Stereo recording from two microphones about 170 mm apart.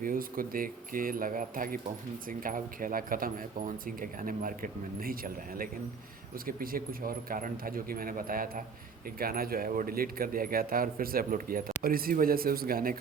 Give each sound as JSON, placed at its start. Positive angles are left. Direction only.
{"t": 0.0, "sound": "speech", "side_deg": -55}